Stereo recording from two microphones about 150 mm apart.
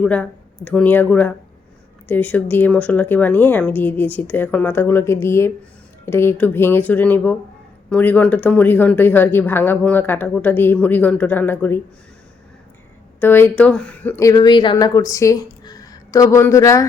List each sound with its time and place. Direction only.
0.0 s speech: 10° left (ahead or behind)
13.1 s speech: 15° left (ahead or behind)